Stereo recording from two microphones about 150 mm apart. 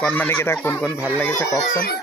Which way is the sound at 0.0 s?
10° left (ahead or behind).